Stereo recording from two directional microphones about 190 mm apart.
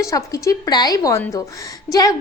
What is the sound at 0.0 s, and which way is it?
A woman's voice, 15° left (ahead or behind).